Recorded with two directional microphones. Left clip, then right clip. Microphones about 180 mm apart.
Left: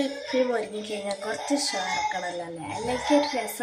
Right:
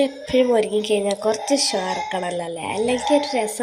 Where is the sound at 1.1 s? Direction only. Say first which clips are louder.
Right 8 dB; 30° right (ahead or behind).